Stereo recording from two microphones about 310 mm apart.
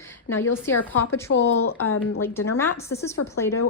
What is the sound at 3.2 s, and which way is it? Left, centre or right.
Speech, left.